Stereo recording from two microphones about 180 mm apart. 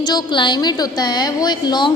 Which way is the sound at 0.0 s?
25° left (ahead or behind).